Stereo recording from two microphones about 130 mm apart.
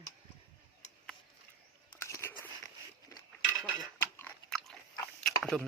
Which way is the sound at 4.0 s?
20° left (ahead or behind).